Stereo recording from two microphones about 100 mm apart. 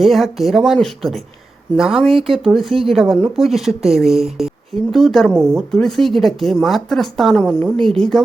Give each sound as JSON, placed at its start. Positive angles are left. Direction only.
{"t": 0.0, "sound": "a woman's voice", "side_deg": 0}